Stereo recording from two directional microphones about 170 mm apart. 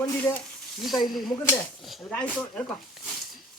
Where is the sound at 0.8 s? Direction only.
Centre (ahead or behind).